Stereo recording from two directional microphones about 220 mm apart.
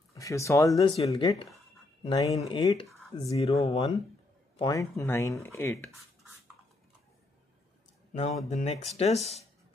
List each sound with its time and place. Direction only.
0.1 s speech: 15° left (ahead or behind)
3.3 s speech: 25° left (ahead or behind); by 5.8 s 10° left (ahead or behind)
8.5 s speech: 30° left (ahead or behind)